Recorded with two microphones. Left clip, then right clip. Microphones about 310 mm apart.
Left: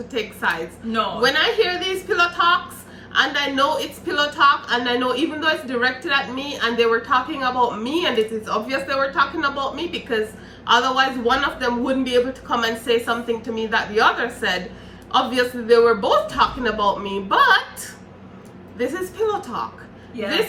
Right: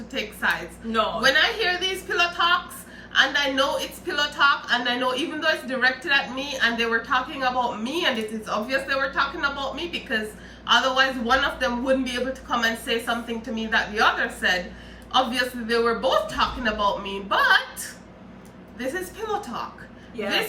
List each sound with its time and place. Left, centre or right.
0.1 s a woman's voice: centre
18.8 s a woman's voice: centre